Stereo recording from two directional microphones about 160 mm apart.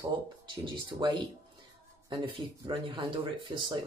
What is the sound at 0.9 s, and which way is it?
Speech, 25° right (ahead or behind).